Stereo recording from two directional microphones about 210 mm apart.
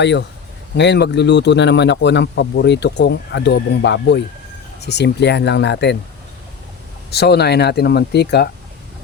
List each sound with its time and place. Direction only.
0.0 s speech: 55° left (ahead or behind)
7.1 s speech: 50° left (ahead or behind)